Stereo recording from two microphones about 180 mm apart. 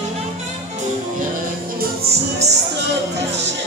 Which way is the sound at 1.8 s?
60° right (ahead or behind).